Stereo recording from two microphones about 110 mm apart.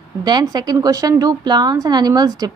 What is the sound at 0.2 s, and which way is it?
A woman's voice, 40° right (ahead or behind).